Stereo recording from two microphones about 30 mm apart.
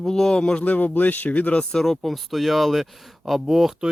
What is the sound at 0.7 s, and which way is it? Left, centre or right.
Speech, left.